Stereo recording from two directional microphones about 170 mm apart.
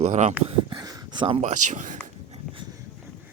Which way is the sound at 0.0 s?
45° right (ahead or behind).